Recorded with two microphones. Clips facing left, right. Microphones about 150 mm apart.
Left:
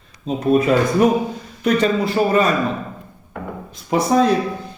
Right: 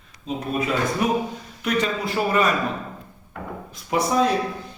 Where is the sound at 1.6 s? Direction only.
35° left (ahead or behind).